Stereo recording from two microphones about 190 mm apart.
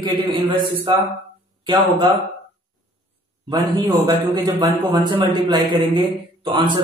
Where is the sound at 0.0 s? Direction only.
25° right (ahead or behind).